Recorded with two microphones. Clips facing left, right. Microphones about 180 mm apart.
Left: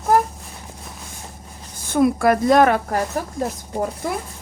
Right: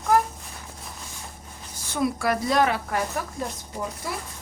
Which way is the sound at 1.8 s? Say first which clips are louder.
Left 8 dB; 55° left (ahead or behind).